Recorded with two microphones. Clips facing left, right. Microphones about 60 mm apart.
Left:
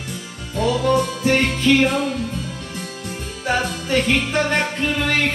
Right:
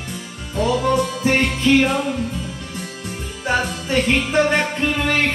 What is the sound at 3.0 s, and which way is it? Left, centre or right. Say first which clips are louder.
Music: even; right.